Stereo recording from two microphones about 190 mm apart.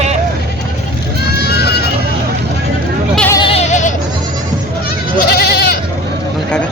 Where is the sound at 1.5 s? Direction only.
60° left (ahead or behind).